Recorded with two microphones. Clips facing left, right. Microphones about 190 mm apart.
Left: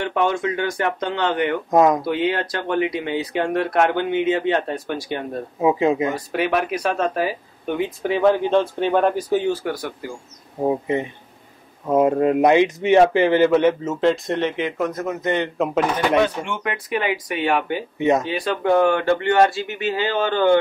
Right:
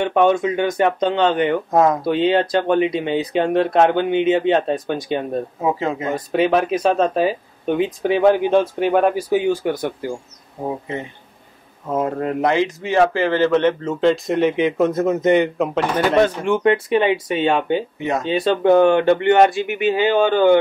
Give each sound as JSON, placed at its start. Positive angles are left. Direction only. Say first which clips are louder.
{"t": 0.0, "sound": "speech", "louder": "right 5 dB", "side_deg": -20}
{"t": 1.7, "sound": "speech", "louder": "left 2 dB", "side_deg": 15}
{"t": 2.0, "sound": "speech", "louder": "right 5 dB", "side_deg": -25}
{"t": 5.6, "sound": "speech", "louder": "left 6 dB", "side_deg": 15}
{"t": 6.1, "sound": "speech", "louder": "right 4 dB", "side_deg": -20}
{"t": 10.9, "sound": "speech", "louder": "left 5 dB", "side_deg": 15}
{"t": 14.8, "sound": "speech", "louder": "right 7 dB", "side_deg": -25}
{"t": 15.5, "sound": "speech", "louder": "even", "side_deg": 0}
{"t": 16.2, "sound": "speech", "louder": "right 4 dB", "side_deg": -35}
{"t": 17.9, "sound": "speech", "louder": "left 4 dB", "side_deg": 20}
{"t": 18.2, "sound": "speech", "louder": "right 5 dB", "side_deg": -25}